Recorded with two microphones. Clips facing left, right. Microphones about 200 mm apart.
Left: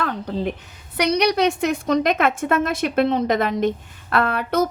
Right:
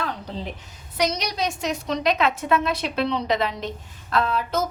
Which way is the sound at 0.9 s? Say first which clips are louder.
Left 7 dB; 65° left (ahead or behind).